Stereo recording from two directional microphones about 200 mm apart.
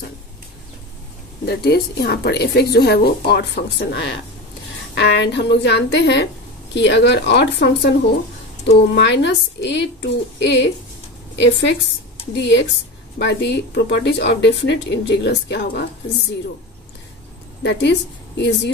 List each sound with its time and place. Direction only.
1.4 s speech: 55° left (ahead or behind)
8.9 s speech: 60° left (ahead or behind)
17.6 s speech: 60° left (ahead or behind)